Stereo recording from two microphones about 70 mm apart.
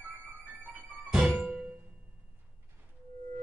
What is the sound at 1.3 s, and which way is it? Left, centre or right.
Music, right.